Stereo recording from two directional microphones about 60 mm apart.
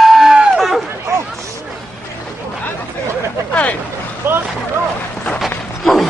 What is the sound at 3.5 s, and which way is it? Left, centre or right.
Boat, left.